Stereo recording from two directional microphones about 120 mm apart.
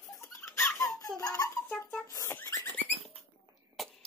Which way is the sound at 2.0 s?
25° left (ahead or behind).